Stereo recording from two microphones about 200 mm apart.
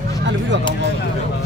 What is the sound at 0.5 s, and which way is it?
Speech, 60° right (ahead or behind).